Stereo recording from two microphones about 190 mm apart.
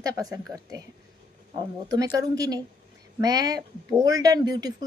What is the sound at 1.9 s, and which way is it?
Speech, 20° right (ahead or behind).